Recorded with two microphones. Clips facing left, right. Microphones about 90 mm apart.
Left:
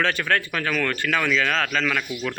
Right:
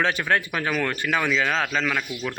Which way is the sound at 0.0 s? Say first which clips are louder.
Even; 15° right (ahead or behind).